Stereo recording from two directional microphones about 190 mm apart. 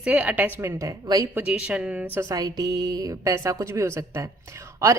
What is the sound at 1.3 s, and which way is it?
Speech, 5° right (ahead or behind).